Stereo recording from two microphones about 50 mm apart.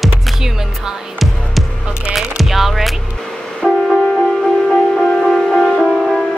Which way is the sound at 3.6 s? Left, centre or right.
Left.